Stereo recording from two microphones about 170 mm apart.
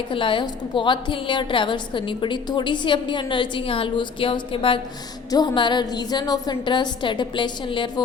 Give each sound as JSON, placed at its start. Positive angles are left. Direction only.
{"t": 0.1, "sound": "a woman's voice", "side_deg": 30}